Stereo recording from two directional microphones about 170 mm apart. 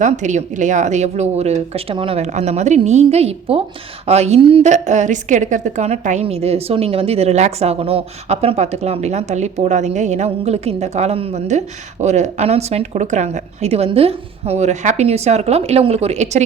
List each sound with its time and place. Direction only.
0.0 s a woman's voice: 45° right (ahead or behind)